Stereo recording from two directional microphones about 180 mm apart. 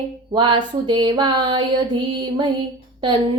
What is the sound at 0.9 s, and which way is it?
Female singing, 25° right (ahead or behind).